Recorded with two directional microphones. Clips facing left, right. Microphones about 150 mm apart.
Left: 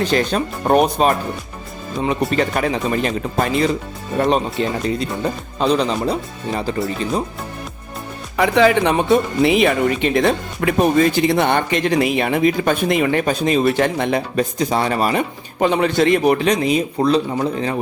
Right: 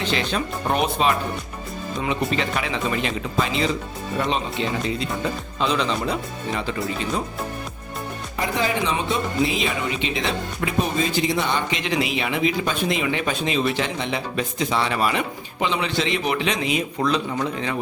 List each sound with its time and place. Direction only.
0.0 s a man's voice: 45° left (ahead or behind)
8.4 s a man's voice: 75° left (ahead or behind); by 17.7 s 35° left (ahead or behind)